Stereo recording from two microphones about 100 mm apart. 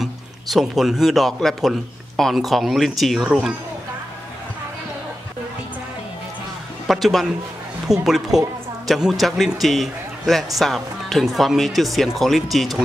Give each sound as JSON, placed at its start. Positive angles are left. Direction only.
{"t": 0.0, "sound": "a man's voice", "side_deg": 0}
{"t": 6.9, "sound": "a man's voice", "side_deg": 0}